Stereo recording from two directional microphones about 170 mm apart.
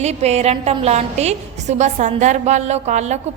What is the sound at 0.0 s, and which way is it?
A woman's voice, 40° right (ahead or behind).